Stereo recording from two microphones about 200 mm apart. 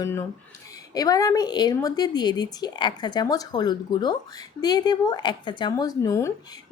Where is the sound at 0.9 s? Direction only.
20° left (ahead or behind).